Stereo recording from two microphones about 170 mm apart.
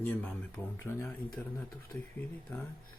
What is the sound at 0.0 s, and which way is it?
Speech, 10° left (ahead or behind).